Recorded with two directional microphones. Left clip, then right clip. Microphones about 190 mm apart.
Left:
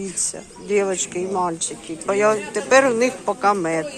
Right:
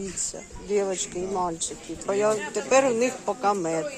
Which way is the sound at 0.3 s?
5° right (ahead or behind).